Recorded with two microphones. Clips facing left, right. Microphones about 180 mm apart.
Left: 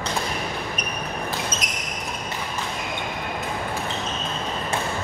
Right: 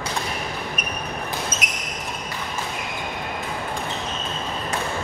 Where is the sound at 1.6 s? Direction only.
10° right (ahead or behind).